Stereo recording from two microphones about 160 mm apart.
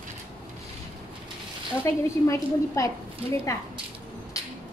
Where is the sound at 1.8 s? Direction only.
20° left (ahead or behind).